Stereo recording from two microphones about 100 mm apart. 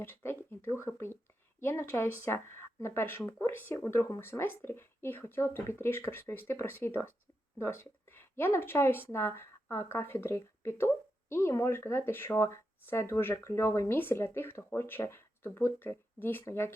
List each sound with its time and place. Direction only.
0.0 s speech: 25° left (ahead or behind)